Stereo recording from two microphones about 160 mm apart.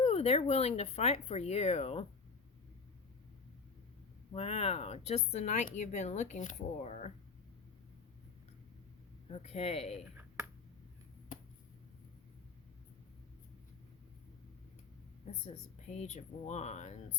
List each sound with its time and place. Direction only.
0.0 s speech: 40° left (ahead or behind)
4.3 s speech: 40° left (ahead or behind)
9.3 s speech: 40° left (ahead or behind)
15.9 s speech: 45° left (ahead or behind)